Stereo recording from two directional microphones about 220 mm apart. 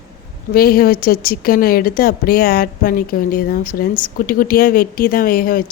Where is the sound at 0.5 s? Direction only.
45° left (ahead or behind).